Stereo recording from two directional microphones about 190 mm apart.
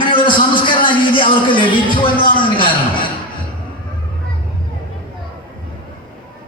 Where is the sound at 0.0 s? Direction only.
25° left (ahead or behind).